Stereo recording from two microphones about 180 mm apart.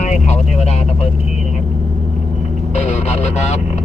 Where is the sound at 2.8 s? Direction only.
40° left (ahead or behind).